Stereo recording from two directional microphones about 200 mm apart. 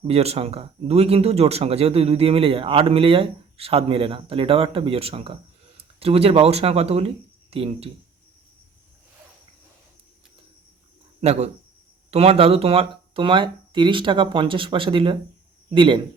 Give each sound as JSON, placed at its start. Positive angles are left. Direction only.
{"t": 0.1, "sound": "speech", "side_deg": -30}
{"t": 11.2, "sound": "speech", "side_deg": -30}